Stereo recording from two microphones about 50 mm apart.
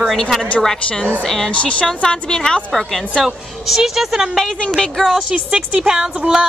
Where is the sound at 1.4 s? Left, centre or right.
Left.